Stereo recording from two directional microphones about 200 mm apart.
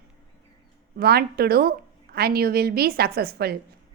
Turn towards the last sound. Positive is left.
turn(degrees=-50)  # may be behind; listen again after turning